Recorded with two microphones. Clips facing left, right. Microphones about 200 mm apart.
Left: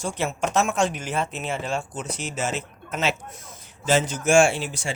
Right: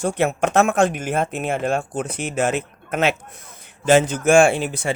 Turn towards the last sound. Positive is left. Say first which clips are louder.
# right 4 dB
turn(degrees=-55)  # may be behind; listen again after turning